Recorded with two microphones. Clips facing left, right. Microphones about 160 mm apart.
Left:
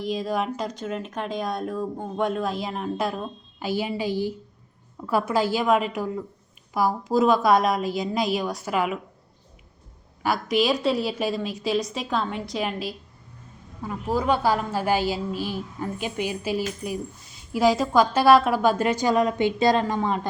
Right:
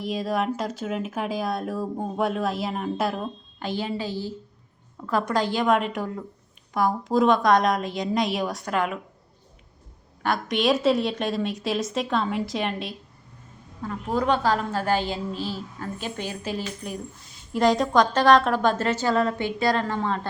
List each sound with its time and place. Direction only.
0.0 s speech: centre (ahead or behind)
10.2 s a woman's voice: 5° left (ahead or behind)